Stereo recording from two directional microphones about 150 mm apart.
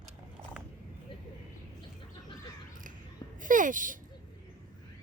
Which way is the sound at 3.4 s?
60° right (ahead or behind).